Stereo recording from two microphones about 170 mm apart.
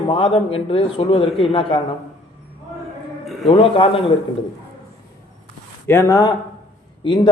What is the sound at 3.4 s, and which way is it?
Speech, 30° left (ahead or behind).